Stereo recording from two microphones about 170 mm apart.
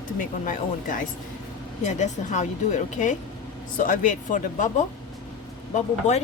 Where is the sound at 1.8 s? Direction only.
45° left (ahead or behind).